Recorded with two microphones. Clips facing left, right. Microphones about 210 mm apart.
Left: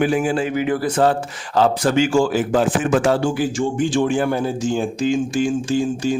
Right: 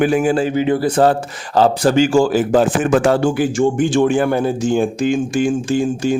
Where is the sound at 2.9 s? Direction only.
55° right (ahead or behind).